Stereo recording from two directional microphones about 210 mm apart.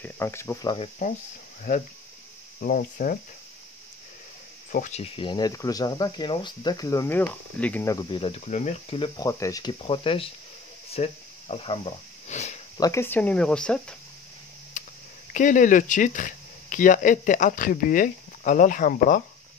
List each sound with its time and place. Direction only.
0.0 s speech: 10° left (ahead or behind)
2.6 s speech: 40° left (ahead or behind)
4.7 s speech: 35° left (ahead or behind)
12.7 s speech: 15° left (ahead or behind)
14.8 s a sound: 35° left (ahead or behind)
15.3 s speech: 35° left (ahead or behind)